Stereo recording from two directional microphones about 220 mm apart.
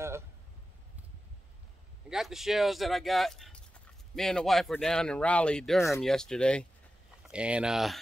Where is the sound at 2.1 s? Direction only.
Centre (ahead or behind).